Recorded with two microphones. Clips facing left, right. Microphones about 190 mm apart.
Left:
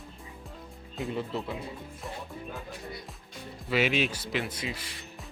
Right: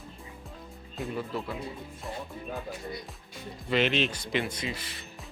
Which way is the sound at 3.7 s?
5° left (ahead or behind).